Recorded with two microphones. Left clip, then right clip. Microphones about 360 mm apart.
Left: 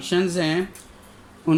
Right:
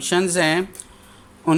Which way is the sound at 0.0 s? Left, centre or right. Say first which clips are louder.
Right 4 dB; centre.